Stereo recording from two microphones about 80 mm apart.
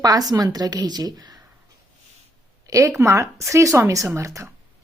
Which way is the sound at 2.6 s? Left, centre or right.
Right.